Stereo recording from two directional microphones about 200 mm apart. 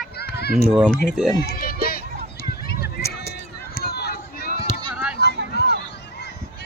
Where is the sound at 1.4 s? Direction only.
50° left (ahead or behind).